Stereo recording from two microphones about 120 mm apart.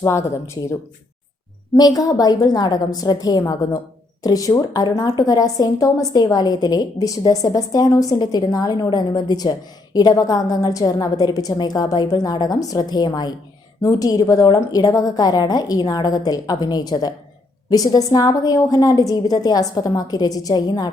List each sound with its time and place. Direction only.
0.0 s speech: 25° left (ahead or behind)
1.7 s a woman's voice: 30° left (ahead or behind)